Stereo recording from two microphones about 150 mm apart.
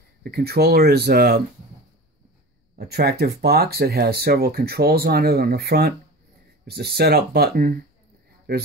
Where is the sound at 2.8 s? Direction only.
90° right.